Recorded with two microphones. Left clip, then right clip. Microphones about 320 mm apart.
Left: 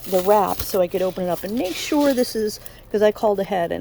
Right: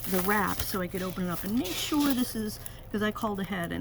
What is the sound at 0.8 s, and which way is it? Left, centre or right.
Speech, left.